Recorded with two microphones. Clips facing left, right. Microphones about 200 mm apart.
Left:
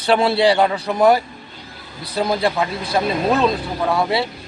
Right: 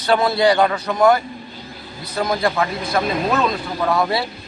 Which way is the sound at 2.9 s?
30° left (ahead or behind).